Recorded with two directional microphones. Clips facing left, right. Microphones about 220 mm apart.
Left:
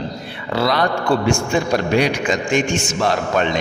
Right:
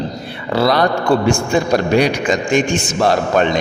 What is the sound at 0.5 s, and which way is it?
A man's voice, 40° right (ahead or behind).